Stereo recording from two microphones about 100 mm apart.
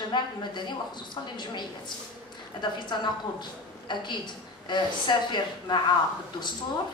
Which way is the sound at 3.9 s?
50° left (ahead or behind).